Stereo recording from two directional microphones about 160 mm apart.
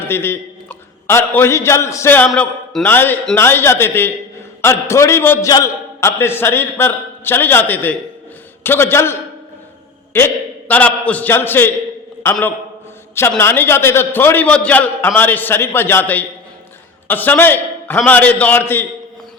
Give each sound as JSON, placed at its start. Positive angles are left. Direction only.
{"t": 0.0, "sound": "a man's voice", "side_deg": 15}